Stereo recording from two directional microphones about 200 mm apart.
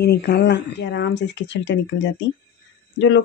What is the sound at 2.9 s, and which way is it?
Speech, 65° left (ahead or behind).